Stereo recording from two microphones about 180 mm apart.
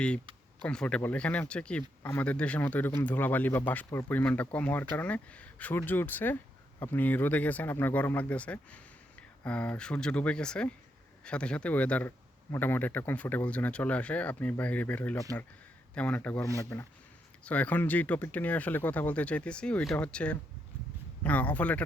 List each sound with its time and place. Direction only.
0.6 s speech: 5° left (ahead or behind)